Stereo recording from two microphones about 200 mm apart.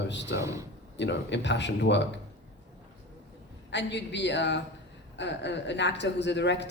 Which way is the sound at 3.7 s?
60° left (ahead or behind).